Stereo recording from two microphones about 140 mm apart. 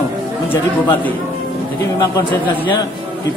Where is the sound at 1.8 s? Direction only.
35° left (ahead or behind).